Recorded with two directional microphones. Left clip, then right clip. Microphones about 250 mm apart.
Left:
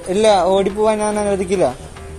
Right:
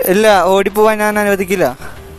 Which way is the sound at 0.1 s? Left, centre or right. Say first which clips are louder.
Right 3 dB; right.